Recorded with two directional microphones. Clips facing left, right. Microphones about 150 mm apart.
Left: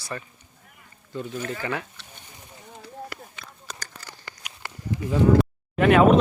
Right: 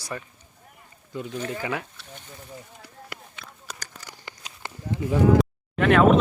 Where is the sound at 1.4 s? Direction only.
10° right (ahead or behind).